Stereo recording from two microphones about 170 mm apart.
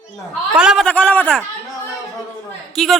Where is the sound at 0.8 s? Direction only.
5° left (ahead or behind).